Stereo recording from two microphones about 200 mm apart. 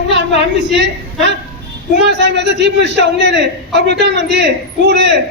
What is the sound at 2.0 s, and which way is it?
A man's voice, 55° right (ahead or behind).